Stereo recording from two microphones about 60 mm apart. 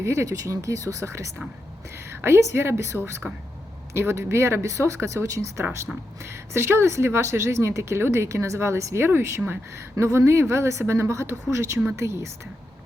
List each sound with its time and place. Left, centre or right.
0.0 s speech: right